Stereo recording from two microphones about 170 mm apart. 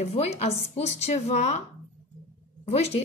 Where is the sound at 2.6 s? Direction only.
40° left (ahead or behind).